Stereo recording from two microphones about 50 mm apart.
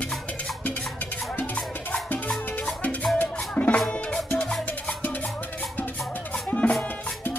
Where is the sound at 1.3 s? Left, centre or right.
Left.